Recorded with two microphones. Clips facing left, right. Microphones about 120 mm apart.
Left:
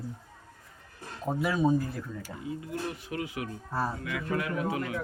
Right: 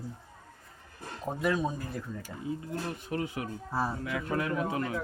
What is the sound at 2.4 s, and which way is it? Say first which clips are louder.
Speech: even; 35° right (ahead or behind).